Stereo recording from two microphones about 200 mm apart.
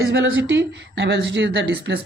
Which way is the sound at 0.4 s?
65° right (ahead or behind).